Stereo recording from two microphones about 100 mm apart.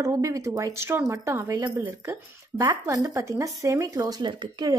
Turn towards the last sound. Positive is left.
turn(degrees=-50)  # may be behind; listen again after turning